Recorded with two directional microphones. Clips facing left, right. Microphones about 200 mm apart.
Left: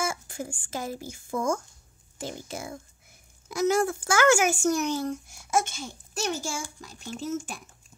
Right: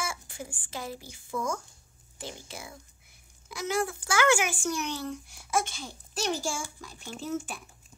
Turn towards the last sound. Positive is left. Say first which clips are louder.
# left 2 dB
turn(degrees=45)  # may be behind; listen again after turning